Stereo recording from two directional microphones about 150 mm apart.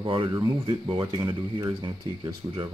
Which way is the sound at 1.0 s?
20° right (ahead or behind).